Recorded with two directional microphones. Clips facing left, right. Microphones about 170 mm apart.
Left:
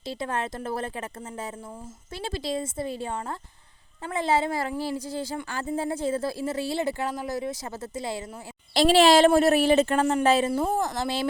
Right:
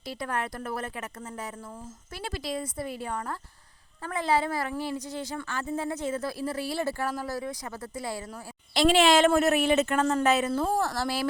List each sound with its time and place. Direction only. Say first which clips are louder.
0.0 s speech: left 2 dB; 25° left (ahead or behind)
8.7 s a woman's voice: left 3 dB; 35° left (ahead or behind)
10.5 s speech: left 1 dB; 10° left (ahead or behind)